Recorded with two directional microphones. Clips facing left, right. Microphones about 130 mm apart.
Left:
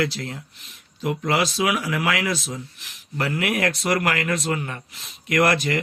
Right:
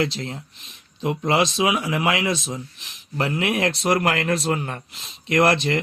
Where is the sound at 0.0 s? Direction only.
25° right (ahead or behind).